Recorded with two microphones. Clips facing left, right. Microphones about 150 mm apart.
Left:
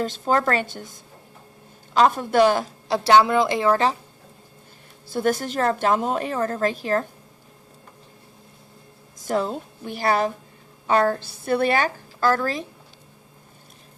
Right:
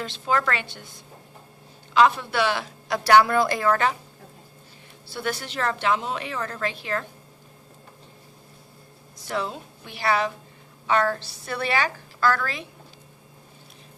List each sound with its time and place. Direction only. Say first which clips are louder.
0.0 s a woman's voice: left 4 dB; 40° left (ahead or behind)
2.9 s a woman's voice: left 1 dB; 25° left (ahead or behind)
5.0 s a woman's voice: left 8 dB; 45° left (ahead or behind)
9.2 s a woman's voice: left 5 dB; 45° left (ahead or behind)